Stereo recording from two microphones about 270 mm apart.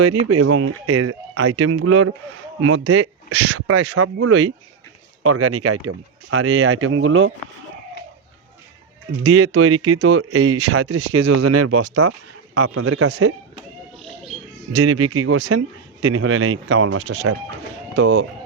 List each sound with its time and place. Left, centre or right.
0.3 s speech: right
9.3 s speech: right
11.3 s speech: right
12.5 s speech: right
14.8 s speech: right